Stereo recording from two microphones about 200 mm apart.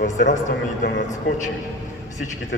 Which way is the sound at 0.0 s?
40° left (ahead or behind).